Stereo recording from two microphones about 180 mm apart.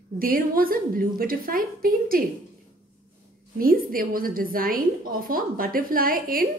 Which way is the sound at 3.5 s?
55° right (ahead or behind).